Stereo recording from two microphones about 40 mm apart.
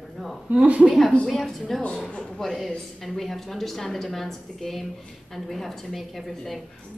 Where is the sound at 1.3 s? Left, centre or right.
Centre.